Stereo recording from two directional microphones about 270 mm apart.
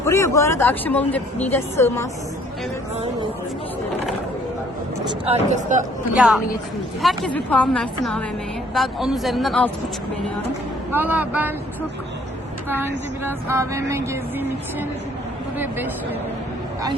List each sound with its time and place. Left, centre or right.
0.0 s speech: centre
5.0 s speech: right
6.1 s a woman's voice: centre
10.9 s speech: centre
12.6 s speech: centre